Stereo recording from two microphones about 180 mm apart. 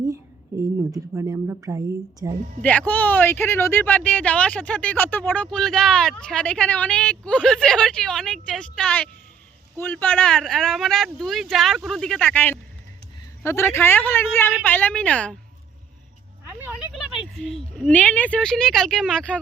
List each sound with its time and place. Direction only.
0.8 s a woman's voice: 15° right (ahead or behind)
2.6 s speech: 10° left (ahead or behind)
16.6 s speech: 5° right (ahead or behind)